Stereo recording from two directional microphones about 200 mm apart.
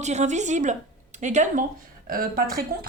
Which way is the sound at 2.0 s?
45° right (ahead or behind).